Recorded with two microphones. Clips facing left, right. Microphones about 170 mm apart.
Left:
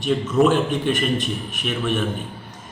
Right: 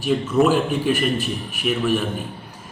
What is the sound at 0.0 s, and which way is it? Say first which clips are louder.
Speech: even; 5° right (ahead or behind).